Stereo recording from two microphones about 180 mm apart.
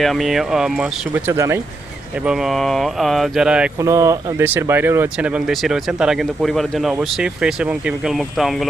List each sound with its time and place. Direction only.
0.0 s speech: centre (ahead or behind)
1.3 s speech: 15° right (ahead or behind)
2.2 s speech: 5° right (ahead or behind)
3.8 s speech: 15° right (ahead or behind); by 8.6 s centre (ahead or behind)